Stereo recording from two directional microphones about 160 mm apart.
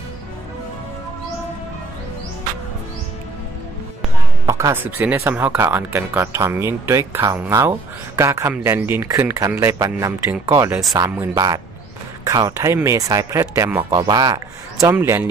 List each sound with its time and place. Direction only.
4.5 s speech: 20° right (ahead or behind)
13.9 s speech: 25° right (ahead or behind)